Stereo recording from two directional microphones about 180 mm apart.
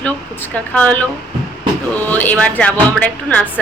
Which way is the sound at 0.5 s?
10° left (ahead or behind).